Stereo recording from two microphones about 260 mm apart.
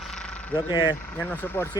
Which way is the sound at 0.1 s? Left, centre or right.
Centre.